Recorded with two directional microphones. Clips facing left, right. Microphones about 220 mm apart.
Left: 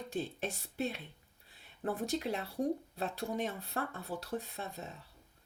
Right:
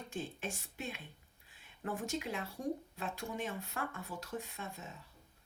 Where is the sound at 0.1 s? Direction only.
35° left (ahead or behind).